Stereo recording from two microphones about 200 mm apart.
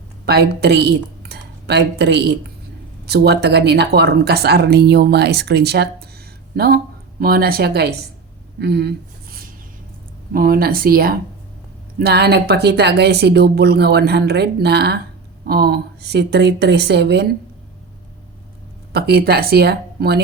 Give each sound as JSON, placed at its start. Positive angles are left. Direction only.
{"t": 0.3, "sound": "a woman's voice", "side_deg": -55}
{"t": 8.5, "sound": "a sound", "side_deg": -55}
{"t": 10.3, "sound": "speech", "side_deg": -45}
{"t": 18.9, "sound": "speech", "side_deg": -50}